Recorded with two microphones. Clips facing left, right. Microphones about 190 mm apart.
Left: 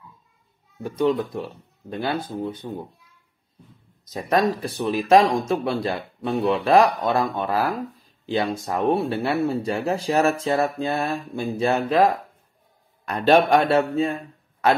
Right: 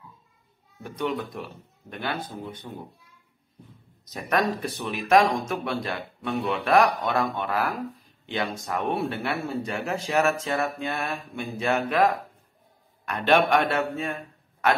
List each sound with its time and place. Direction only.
0.8 s speech: 30° left (ahead or behind)
4.1 s a man's voice: 30° left (ahead or behind)